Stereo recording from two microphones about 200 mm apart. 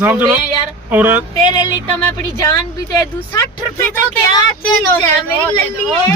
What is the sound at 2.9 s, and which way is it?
Speech, 15° left (ahead or behind).